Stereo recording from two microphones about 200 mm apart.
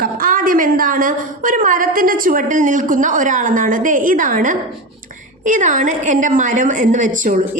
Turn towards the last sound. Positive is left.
turn(degrees=-40)  # may be behind; listen again after turning